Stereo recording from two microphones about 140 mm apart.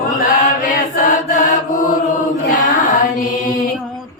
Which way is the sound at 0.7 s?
75° left (ahead or behind).